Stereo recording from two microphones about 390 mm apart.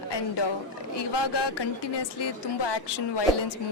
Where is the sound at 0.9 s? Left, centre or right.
Left.